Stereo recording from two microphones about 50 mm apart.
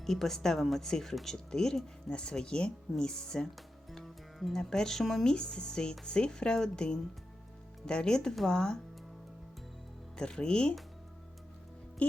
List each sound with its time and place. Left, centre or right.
0.0 s speech: centre
3.9 s music: centre
4.5 s speech: centre
10.2 s speech: centre